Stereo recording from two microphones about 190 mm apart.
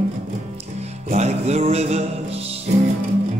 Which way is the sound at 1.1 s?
35° right (ahead or behind).